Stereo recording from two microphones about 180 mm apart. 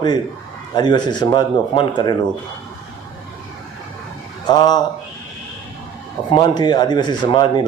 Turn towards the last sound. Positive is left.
turn(degrees=25)  # may be behind; listen again after turning